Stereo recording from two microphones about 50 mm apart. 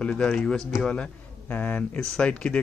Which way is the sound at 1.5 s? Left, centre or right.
Left.